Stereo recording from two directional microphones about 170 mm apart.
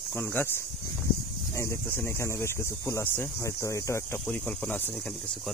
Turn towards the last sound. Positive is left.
turn(degrees=10)  # may be behind; listen again after turning